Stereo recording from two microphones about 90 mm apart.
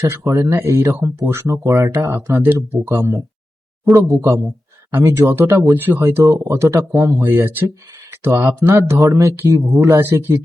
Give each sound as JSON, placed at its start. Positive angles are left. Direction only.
{"t": 0.0, "sound": "speech", "side_deg": -30}
{"t": 5.1, "sound": "a man's voice", "side_deg": -25}